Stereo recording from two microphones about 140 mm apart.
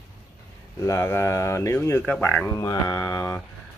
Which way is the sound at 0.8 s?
20° left (ahead or behind).